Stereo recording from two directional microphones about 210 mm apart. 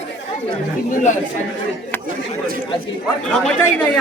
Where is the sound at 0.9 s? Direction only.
35° left (ahead or behind).